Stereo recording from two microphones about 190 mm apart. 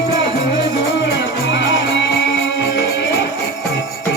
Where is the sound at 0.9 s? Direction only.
65° left (ahead or behind).